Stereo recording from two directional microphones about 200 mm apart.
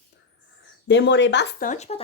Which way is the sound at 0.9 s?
60° left (ahead or behind).